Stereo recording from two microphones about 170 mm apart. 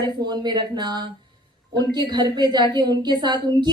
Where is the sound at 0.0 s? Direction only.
25° right (ahead or behind).